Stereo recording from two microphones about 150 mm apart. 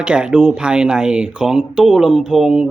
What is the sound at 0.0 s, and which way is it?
Speech, 5° right (ahead or behind).